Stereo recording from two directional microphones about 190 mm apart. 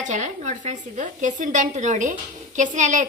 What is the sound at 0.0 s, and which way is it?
A woman's voice, 40° right (ahead or behind).